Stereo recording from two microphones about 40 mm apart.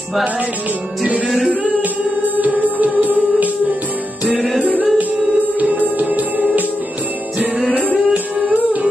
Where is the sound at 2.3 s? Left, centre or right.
Right.